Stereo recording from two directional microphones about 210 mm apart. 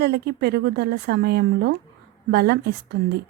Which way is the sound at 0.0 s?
50° right (ahead or behind).